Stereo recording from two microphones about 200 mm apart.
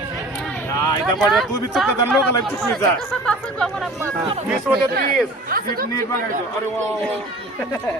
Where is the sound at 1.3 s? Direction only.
Centre (ahead or behind).